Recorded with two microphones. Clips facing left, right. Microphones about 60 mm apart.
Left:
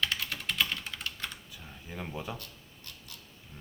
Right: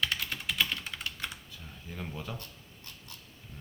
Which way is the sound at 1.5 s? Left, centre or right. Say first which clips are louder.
Left 1 dB; centre.